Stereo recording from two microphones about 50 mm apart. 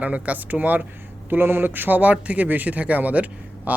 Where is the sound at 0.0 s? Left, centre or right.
Right.